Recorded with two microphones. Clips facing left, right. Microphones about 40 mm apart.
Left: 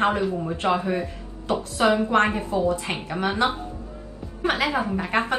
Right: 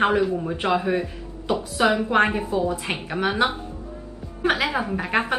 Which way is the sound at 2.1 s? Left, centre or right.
Centre.